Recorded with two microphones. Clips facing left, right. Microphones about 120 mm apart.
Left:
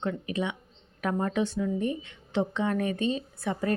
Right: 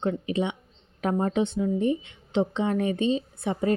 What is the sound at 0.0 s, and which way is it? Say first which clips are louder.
A woman's voice: right 4 dB; 25° right (ahead or behind).